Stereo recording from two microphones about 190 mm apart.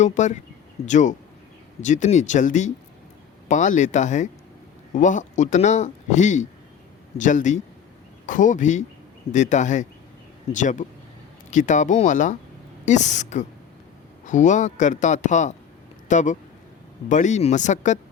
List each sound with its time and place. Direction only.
0.0 s speech: 40° left (ahead or behind)